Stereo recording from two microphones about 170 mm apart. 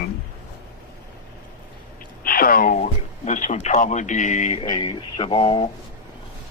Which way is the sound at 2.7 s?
45° left (ahead or behind).